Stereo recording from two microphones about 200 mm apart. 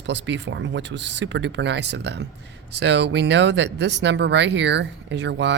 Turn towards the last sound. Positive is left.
turn(degrees=-60)  # may be behind; listen again after turning